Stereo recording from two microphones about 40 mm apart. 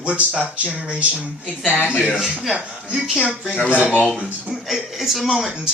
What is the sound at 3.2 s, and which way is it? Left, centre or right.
Speech, right.